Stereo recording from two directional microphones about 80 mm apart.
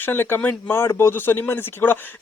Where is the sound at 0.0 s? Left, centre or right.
Left.